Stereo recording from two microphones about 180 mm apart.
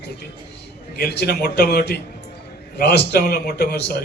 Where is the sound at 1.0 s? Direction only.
65° left (ahead or behind).